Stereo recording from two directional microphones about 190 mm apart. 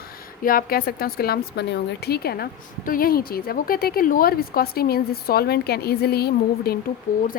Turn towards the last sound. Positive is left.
turn(degrees=50)  # may be behind; listen again after turning